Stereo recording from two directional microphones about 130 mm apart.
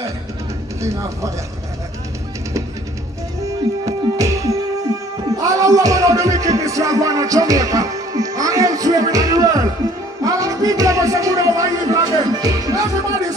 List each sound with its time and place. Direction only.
0.7 s speech: 25° right (ahead or behind)
3.4 s music: 25° right (ahead or behind)